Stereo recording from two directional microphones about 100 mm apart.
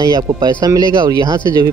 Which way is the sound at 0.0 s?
45° right (ahead or behind).